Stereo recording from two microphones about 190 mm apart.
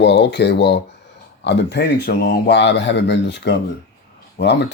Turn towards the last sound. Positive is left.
turn(degrees=65)  # may be behind; listen again after turning